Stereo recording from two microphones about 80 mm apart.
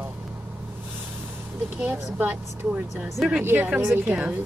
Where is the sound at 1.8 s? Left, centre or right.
Right.